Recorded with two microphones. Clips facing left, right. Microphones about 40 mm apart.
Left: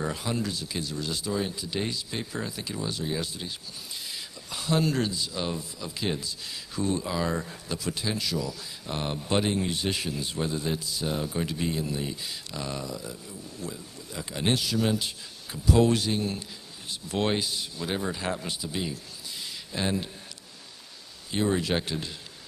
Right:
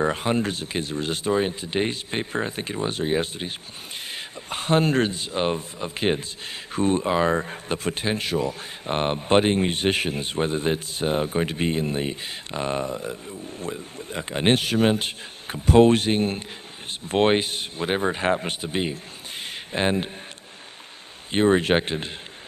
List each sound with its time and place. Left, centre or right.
0.0 s a man's voice: right
21.3 s speech: right